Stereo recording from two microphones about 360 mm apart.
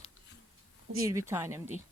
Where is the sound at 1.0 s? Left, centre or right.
Centre.